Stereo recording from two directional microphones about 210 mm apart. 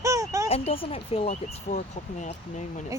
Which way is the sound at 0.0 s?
15° right (ahead or behind).